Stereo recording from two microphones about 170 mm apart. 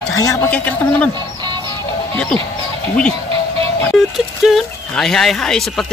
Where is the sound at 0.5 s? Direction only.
10° left (ahead or behind).